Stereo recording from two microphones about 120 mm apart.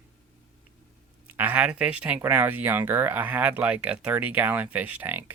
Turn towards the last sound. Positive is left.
turn(degrees=-15)  # may be behind; listen again after turning